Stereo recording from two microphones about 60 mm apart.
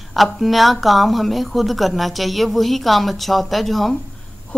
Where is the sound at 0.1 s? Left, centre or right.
Centre.